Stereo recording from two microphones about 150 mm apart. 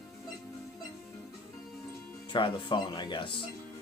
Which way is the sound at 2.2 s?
35° left (ahead or behind).